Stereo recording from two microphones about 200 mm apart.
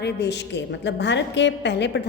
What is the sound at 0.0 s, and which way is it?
A woman's voice, 60° left (ahead or behind).